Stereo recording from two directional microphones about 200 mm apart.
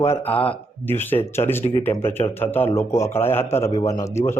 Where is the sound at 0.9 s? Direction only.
10° left (ahead or behind).